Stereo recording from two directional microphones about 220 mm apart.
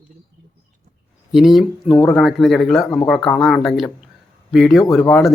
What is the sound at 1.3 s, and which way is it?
Speech, centre (ahead or behind).